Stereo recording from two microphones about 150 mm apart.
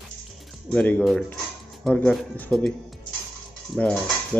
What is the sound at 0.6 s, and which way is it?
Speech, 10° left (ahead or behind).